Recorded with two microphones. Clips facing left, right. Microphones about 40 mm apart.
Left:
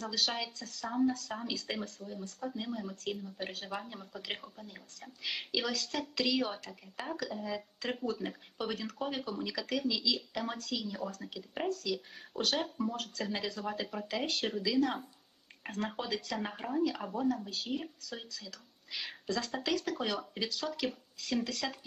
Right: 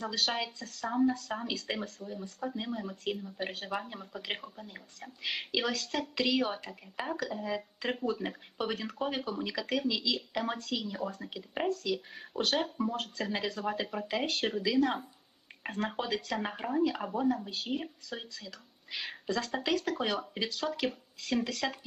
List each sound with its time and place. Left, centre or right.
0.2 s speech: centre